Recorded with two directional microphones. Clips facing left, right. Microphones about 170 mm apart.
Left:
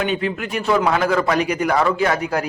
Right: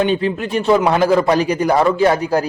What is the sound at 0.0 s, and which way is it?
A man's voice, 30° right (ahead or behind).